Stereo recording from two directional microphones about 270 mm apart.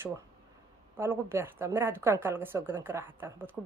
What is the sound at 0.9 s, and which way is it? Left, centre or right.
A woman's voice, centre.